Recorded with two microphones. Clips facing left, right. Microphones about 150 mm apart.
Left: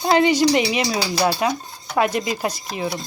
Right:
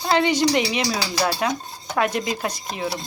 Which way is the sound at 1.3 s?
5° left (ahead or behind).